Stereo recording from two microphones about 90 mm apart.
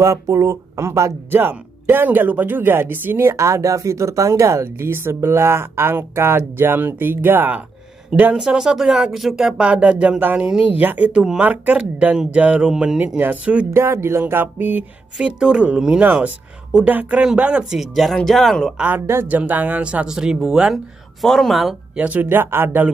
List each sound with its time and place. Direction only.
0.0 s speech: 35° right (ahead or behind)
1.3 s speech: 25° right (ahead or behind)
8.4 s speech: 5° right (ahead or behind)
13.7 s speech: 30° right (ahead or behind)
15.1 s speech: 10° right (ahead or behind)
18.8 s speech: 20° right (ahead or behind); by 21.7 s centre (ahead or behind)
21.9 s speech: 15° right (ahead or behind)